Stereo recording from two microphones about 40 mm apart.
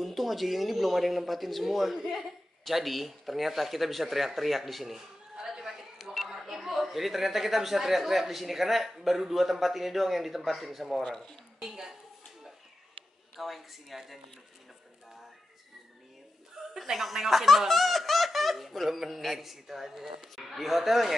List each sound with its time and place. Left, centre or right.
0.0 s speech: centre
5.4 s a sound: centre
9.0 s speech: centre
11.0 s speech: centre
11.6 s a woman's voice: centre
13.4 s speech: centre
16.7 s speech: centre